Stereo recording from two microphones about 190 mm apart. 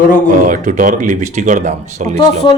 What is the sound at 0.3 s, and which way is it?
Speech, 45° right (ahead or behind).